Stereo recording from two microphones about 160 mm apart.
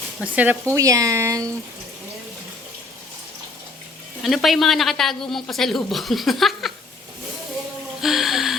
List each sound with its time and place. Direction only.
0.3 s speech: 15° right (ahead or behind)
4.2 s a woman's voice: centre (ahead or behind)
8.0 s gasp: centre (ahead or behind)